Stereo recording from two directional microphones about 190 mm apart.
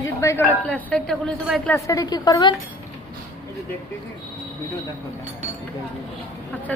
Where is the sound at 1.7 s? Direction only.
15° left (ahead or behind).